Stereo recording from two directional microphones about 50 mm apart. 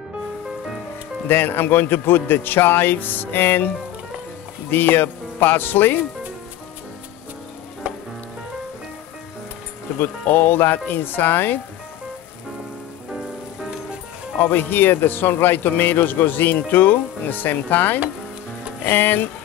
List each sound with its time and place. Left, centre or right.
1.2 s speech: left
7.8 s frying: right
9.9 s speech: left
14.4 s speech: left